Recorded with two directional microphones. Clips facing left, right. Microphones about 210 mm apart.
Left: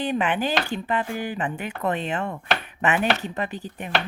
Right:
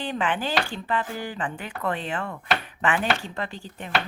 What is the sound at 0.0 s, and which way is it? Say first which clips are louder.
Speech: left 3 dB; 20° left (ahead or behind).